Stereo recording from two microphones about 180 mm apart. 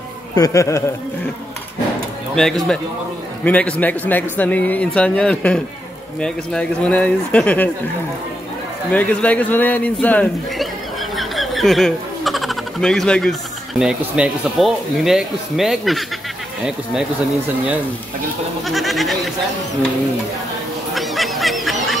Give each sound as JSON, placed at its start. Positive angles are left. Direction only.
{"t": 0.4, "sound": "a man's voice", "side_deg": 15}
{"t": 2.3, "sound": "a man's voice", "side_deg": 0}
{"t": 8.9, "sound": "a man's voice", "side_deg": 5}
{"t": 18.7, "sound": "goat", "side_deg": 0}
{"t": 20.9, "sound": "goose", "side_deg": 0}